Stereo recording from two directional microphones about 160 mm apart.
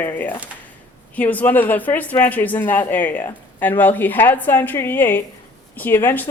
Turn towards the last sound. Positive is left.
turn(degrees=15)  # may be behind; listen again after turning